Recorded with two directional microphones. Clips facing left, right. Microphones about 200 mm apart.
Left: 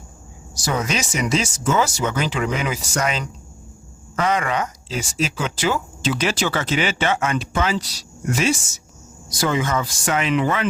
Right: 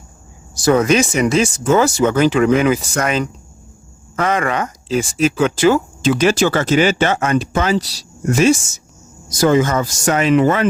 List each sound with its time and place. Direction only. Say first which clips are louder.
0.5 s speech: right 11 dB; 55° right (ahead or behind)
4.3 s speech: right 3 dB; 50° right (ahead or behind)